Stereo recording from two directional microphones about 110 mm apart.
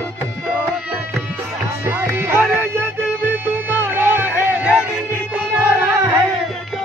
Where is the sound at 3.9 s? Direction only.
15° right (ahead or behind).